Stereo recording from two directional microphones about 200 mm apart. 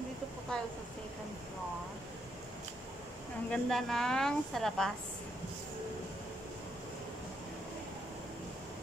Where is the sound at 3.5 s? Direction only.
Centre (ahead or behind).